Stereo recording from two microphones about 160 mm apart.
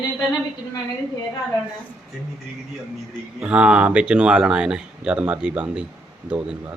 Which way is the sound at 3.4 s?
5° right (ahead or behind).